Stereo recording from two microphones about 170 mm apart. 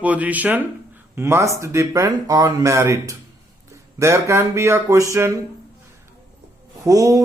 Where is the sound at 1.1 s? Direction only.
15° right (ahead or behind).